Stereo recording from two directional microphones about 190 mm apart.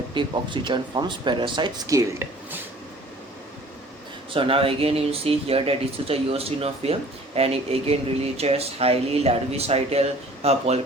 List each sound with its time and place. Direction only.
0.1 s speech: 25° right (ahead or behind)
4.4 s speech: 30° right (ahead or behind)